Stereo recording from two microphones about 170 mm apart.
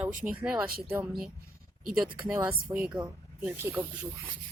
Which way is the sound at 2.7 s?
20° right (ahead or behind).